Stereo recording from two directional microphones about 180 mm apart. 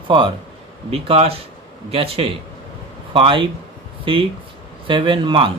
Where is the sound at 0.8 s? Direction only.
30° right (ahead or behind).